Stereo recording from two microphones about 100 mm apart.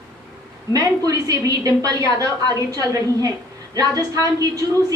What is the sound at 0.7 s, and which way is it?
A woman's voice, 40° right (ahead or behind).